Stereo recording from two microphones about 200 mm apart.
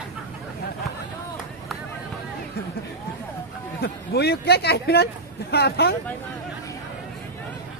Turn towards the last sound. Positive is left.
turn(degrees=50)  # may be behind; listen again after turning